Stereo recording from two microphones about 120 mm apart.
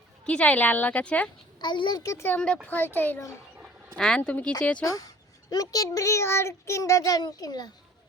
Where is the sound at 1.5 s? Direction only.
40° left (ahead or behind); by 3.2 s 15° left (ahead or behind).